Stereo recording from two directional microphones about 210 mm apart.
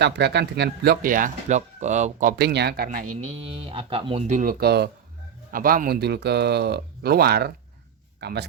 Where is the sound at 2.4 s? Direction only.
50° right (ahead or behind).